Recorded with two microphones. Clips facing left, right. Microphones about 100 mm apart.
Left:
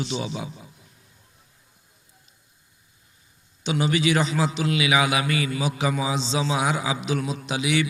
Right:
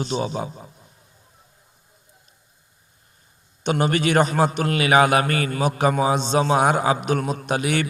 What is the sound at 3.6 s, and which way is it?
A man's voice, 50° right (ahead or behind).